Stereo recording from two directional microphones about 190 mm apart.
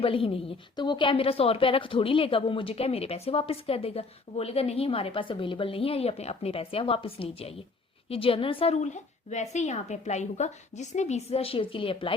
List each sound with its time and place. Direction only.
0.0 s a woman's voice: 30° left (ahead or behind)